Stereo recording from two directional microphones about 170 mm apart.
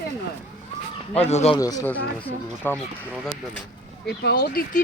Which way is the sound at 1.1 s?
40° left (ahead or behind).